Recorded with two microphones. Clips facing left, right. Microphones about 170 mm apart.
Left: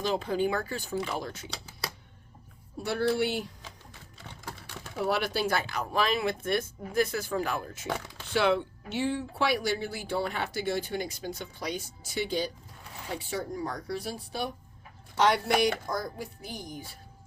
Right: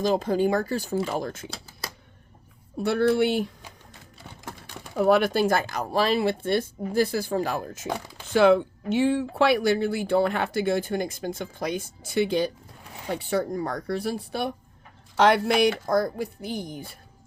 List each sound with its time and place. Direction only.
0.0 s speech: 40° right (ahead or behind)
2.8 s speech: 60° right (ahead or behind)
4.9 s speech: 50° right (ahead or behind)